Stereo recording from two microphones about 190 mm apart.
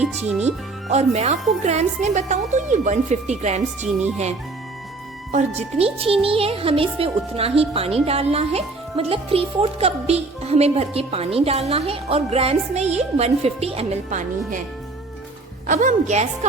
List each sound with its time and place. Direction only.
0.4 s speech: 35° right (ahead or behind)
5.3 s speech: 35° right (ahead or behind)
15.6 s speech: 45° right (ahead or behind)